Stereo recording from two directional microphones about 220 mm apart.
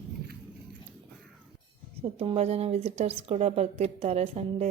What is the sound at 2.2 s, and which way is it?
Speech, 25° right (ahead or behind).